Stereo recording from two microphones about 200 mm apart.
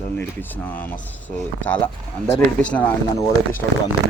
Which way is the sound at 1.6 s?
5° left (ahead or behind).